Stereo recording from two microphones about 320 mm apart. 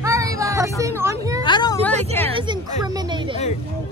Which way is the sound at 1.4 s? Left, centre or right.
Centre.